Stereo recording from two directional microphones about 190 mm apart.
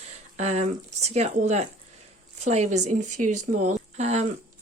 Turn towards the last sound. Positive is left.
turn(degrees=-35)  # may be behind; listen again after turning